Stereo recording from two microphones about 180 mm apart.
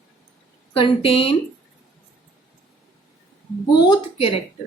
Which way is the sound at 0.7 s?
30° left (ahead or behind).